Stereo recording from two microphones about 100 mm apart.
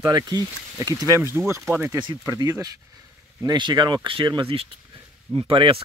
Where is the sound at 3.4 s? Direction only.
45° right (ahead or behind).